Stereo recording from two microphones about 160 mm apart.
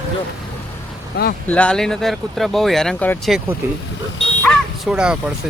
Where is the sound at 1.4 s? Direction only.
10° left (ahead or behind).